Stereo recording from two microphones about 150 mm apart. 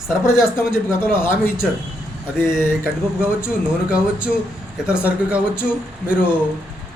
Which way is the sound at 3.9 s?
10° right (ahead or behind).